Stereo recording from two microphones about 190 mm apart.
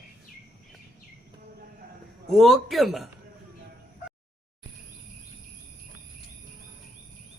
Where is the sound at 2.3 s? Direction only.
Centre (ahead or behind).